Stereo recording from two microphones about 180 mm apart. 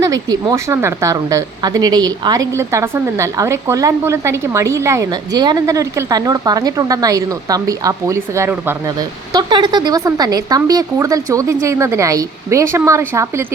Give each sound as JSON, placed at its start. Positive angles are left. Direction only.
{"t": 0.0, "sound": "a woman's voice", "side_deg": -20}